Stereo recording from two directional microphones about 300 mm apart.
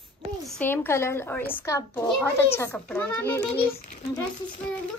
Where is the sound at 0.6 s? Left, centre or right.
Centre.